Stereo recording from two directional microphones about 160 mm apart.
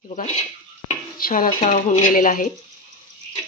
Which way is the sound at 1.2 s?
60° left (ahead or behind).